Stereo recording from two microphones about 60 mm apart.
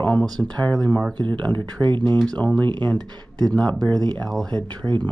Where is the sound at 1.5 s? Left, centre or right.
Left.